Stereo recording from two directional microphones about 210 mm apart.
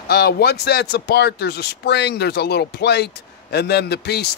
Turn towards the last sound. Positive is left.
turn(degrees=50)  # may be behind; listen again after turning